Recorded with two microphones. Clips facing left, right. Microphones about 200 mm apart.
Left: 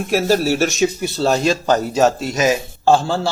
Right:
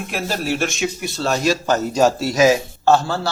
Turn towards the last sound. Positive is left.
turn(degrees=30)  # may be behind; listen again after turning